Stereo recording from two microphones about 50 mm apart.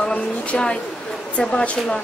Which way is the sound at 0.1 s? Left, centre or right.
Left.